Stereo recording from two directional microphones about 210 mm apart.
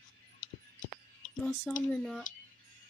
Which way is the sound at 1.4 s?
5° left (ahead or behind).